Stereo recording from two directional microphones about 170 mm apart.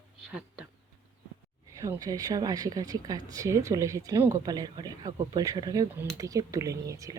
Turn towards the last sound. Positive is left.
turn(degrees=-20)  # may be behind; listen again after turning